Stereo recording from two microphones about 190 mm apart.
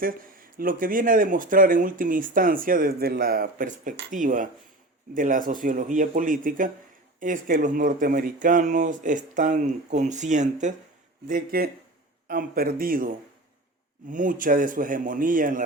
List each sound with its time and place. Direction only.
0.0 s speech: 50° right (ahead or behind)